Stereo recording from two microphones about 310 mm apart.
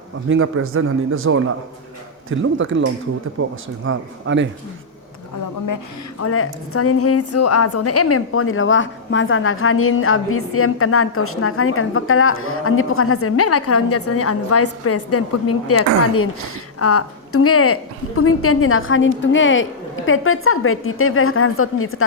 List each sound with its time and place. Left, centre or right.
0.3 s a man's voice: right
6.1 s a woman's voice: left
16.8 s a woman's voice: left